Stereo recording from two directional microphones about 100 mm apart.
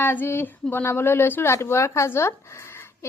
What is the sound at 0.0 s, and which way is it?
Speech, 20° left (ahead or behind).